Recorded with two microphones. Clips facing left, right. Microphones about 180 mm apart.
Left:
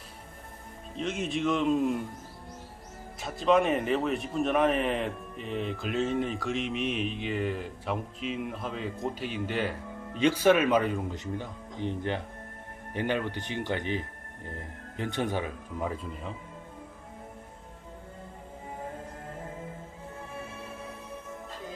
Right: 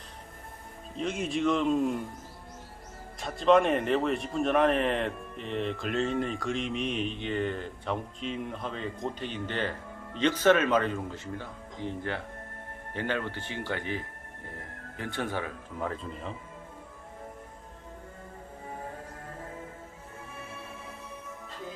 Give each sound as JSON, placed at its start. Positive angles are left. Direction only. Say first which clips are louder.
{"t": 0.9, "sound": "speech", "louder": "right 1 dB", "side_deg": 0}
{"t": 3.2, "sound": "speech", "louder": "right 2 dB", "side_deg": 0}